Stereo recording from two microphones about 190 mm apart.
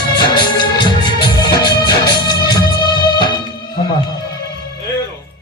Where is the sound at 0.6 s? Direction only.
25° left (ahead or behind).